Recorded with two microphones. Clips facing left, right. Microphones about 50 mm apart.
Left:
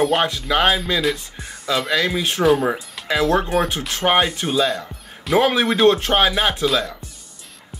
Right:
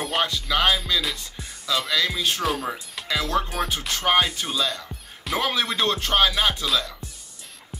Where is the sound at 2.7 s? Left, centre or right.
Left.